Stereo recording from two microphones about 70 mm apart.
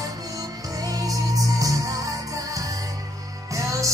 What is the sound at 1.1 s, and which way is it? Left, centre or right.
Music, right.